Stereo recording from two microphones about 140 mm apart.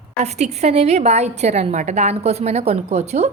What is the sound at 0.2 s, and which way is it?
A woman's voice, 55° right (ahead or behind).